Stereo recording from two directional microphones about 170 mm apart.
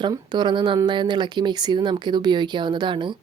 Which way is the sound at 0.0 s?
25° right (ahead or behind).